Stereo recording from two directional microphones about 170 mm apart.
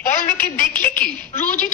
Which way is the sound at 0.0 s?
50° left (ahead or behind).